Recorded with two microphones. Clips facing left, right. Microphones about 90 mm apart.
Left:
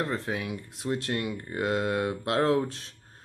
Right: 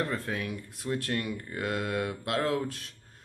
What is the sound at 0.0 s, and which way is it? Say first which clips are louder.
Speech: left 1 dB; 20° left (ahead or behind).